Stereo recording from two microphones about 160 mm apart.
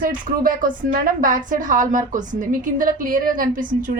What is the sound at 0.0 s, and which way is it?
A woman's voice, 60° right (ahead or behind).